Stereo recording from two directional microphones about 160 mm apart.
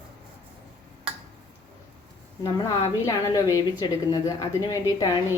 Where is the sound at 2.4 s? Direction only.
20° left (ahead or behind).